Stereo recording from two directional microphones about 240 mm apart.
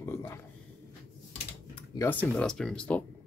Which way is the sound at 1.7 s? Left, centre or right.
Centre.